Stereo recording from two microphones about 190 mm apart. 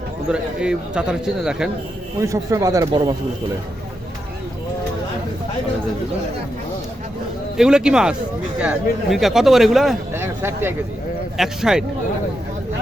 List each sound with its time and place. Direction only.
0.3 s speech: 5° right (ahead or behind)
2.2 s speech: 15° right (ahead or behind)
7.5 s speech: 5° right (ahead or behind)